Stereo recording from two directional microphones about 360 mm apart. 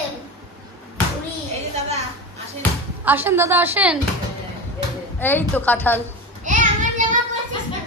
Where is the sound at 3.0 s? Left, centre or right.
Centre.